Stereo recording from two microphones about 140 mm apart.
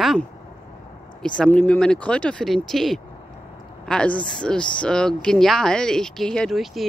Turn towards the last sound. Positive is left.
turn(degrees=0)  # may be behind; listen again after turning